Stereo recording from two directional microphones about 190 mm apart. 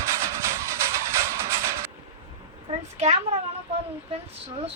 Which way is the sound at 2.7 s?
35° right (ahead or behind).